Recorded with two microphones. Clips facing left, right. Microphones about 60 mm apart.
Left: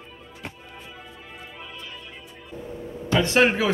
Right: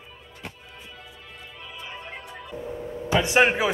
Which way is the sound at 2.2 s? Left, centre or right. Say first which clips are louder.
Right 4 dB; right.